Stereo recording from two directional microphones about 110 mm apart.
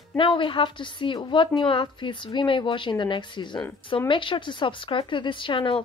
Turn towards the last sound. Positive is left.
turn(degrees=50)  # may be behind; listen again after turning